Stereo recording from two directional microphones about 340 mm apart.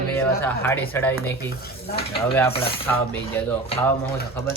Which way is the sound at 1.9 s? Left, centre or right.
Left.